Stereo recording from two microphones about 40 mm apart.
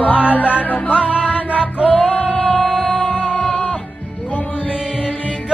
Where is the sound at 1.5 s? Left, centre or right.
Right.